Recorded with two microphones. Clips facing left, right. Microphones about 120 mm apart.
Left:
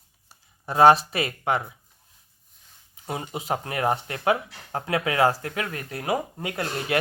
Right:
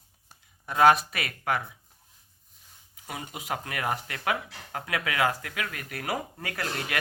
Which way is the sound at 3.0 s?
30° left (ahead or behind).